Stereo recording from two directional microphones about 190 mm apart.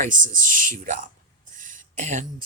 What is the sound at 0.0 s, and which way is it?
Speech, 45° right (ahead or behind).